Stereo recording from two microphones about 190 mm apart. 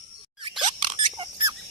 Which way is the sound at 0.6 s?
25° right (ahead or behind).